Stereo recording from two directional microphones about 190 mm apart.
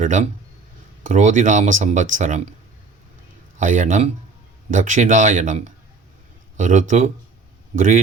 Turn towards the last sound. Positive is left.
turn(degrees=-45)  # may be behind; listen again after turning